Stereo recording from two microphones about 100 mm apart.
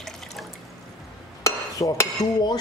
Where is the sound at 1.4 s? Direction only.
35° left (ahead or behind).